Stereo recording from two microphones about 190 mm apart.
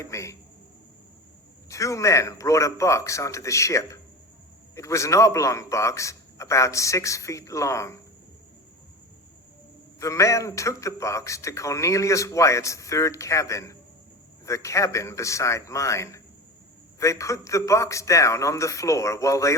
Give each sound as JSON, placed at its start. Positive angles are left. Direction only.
{"t": 0.0, "sound": "a man's voice", "side_deg": 15}
{"t": 1.7, "sound": "a man's voice", "side_deg": 15}
{"t": 10.0, "sound": "a man's voice", "side_deg": 15}